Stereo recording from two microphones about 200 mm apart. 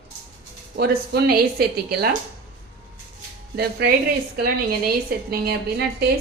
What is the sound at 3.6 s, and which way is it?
Speech, 50° right (ahead or behind).